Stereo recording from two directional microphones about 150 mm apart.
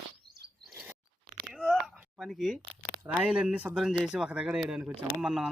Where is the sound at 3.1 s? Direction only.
10° right (ahead or behind).